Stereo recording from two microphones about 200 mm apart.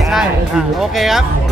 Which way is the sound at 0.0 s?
Centre (ahead or behind).